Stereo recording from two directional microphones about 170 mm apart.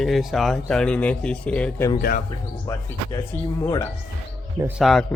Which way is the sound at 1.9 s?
55° left (ahead or behind).